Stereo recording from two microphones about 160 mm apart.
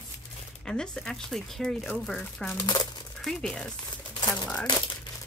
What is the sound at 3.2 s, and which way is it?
Speech, 5° left (ahead or behind).